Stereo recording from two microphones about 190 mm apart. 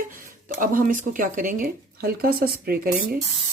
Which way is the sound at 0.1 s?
45° right (ahead or behind).